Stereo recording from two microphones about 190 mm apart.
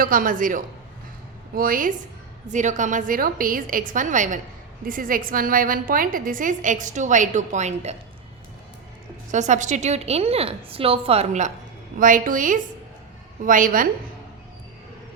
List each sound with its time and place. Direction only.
0.0 s a woman's voice: 45° right (ahead or behind)
9.3 s a woman's voice: 40° right (ahead or behind)